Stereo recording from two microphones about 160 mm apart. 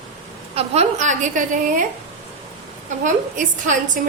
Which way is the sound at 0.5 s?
40° right (ahead or behind).